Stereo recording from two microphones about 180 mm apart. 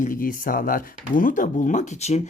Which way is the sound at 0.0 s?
50° left (ahead or behind).